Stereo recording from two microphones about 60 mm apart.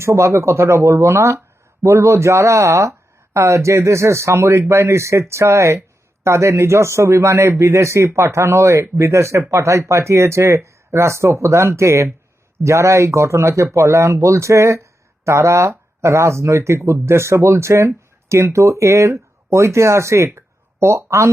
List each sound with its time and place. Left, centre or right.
0.0 s speech: right